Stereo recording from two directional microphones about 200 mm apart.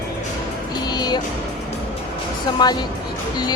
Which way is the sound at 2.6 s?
20° left (ahead or behind).